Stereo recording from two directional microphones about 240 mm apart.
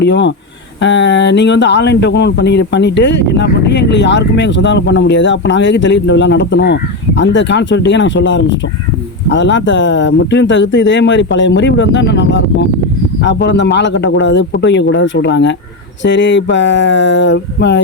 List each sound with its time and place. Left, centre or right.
0.0 s speech: left